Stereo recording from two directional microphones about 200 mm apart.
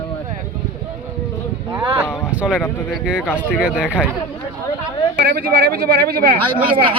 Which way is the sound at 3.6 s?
5° right (ahead or behind).